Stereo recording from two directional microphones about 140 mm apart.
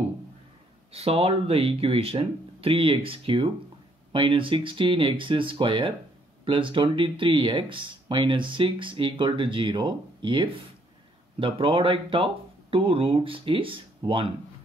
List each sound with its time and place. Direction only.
0.9 s speech: 45° right (ahead or behind)